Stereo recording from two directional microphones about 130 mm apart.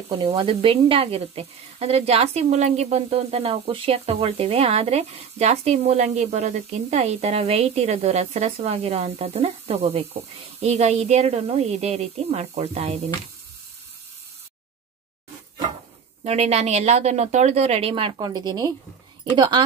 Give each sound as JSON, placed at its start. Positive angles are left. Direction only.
{"t": 0.1, "sound": "speech", "side_deg": -35}
{"t": 16.3, "sound": "speech", "side_deg": -55}